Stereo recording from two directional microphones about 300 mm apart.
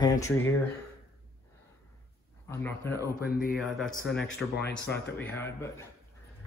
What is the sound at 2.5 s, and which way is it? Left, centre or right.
Speech, centre.